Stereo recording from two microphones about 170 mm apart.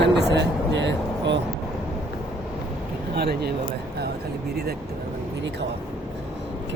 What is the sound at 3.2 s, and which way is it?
Speech, 70° right (ahead or behind).